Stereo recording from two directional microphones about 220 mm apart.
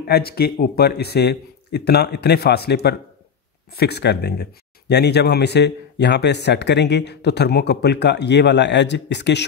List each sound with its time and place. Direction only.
0.0 s speech: 45° left (ahead or behind)